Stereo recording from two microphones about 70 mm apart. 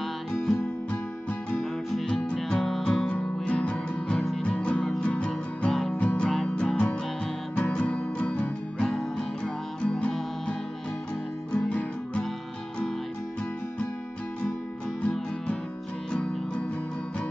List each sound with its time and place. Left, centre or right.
0.0 s music: centre
11.5 s music: centre
15.0 s music: centre